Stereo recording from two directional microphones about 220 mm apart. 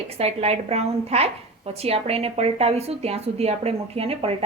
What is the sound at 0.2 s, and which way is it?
A woman's voice, 30° right (ahead or behind).